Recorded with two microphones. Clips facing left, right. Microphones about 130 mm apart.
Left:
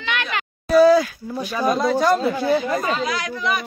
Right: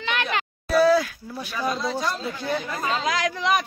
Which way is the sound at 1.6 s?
50° left (ahead or behind).